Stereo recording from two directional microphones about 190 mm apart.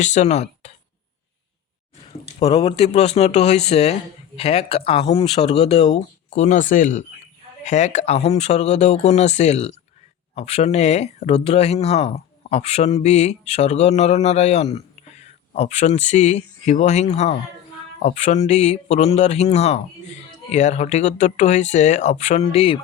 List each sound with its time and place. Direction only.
0.0 s speech: 40° left (ahead or behind)
2.0 s a sound: 30° left (ahead or behind)
2.5 s speech: 20° left (ahead or behind)
2.7 s speech: 35° left (ahead or behind)